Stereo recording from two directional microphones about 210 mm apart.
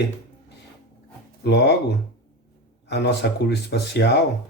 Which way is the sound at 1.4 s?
55° left (ahead or behind).